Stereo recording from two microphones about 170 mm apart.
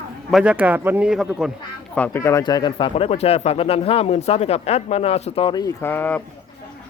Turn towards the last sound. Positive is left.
turn(degrees=10)  # may be behind; listen again after turning